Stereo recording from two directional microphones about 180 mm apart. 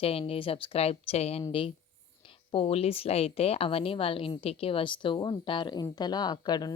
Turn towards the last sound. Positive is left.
turn(degrees=20)  # may be behind; listen again after turning